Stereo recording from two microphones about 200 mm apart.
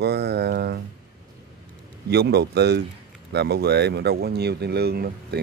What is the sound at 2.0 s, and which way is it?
Speech, 55° right (ahead or behind).